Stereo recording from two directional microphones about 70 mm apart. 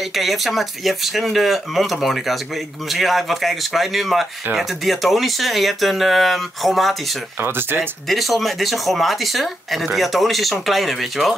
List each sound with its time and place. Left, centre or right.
0.0 s speech: centre
7.3 s speech: right
8.1 s speech: centre